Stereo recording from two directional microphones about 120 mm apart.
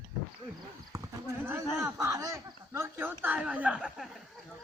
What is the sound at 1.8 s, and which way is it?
Speech, 25° right (ahead or behind).